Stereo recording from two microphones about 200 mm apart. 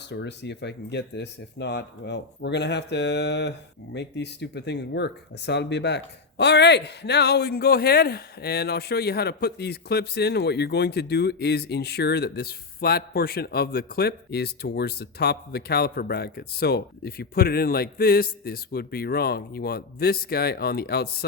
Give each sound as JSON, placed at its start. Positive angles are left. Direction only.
{"t": 0.1, "sound": "speech", "side_deg": 60}